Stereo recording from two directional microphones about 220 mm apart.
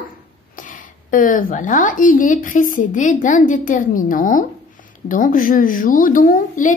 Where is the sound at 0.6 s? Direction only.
35° left (ahead or behind).